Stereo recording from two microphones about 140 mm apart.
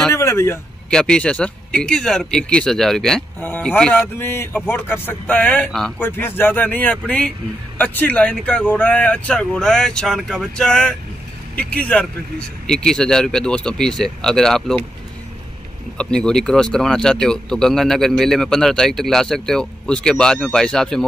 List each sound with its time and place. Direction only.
0.1 s speech: 20° left (ahead or behind)
0.8 s speech: 5° left (ahead or behind)
5.9 s speech: 15° left (ahead or behind)
16.0 s speech: 5° left (ahead or behind)